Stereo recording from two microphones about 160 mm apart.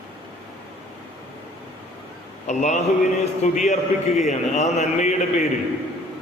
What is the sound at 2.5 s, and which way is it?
A man's voice, 45° left (ahead or behind).